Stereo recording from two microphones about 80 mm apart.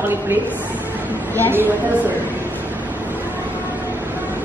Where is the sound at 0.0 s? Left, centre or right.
Right.